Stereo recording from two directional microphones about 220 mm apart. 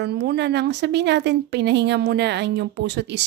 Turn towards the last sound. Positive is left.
turn(degrees=-50)  # may be behind; listen again after turning